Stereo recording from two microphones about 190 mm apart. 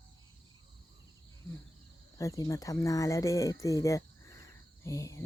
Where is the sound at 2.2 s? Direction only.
15° left (ahead or behind).